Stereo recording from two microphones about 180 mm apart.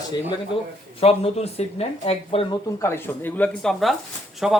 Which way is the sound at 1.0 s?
35° left (ahead or behind).